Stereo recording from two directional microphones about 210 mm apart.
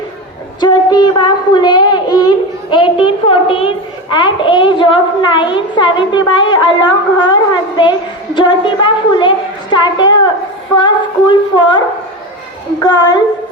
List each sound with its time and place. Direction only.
0.6 s a woman's voice: 20° left (ahead or behind)
12.8 s a woman's voice: 20° left (ahead or behind)